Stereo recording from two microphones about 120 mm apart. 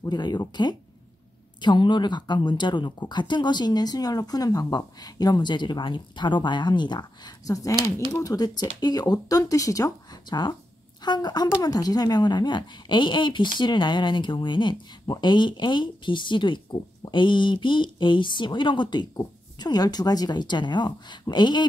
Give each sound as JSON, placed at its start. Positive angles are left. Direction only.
{"t": 0.0, "sound": "speech", "side_deg": 35}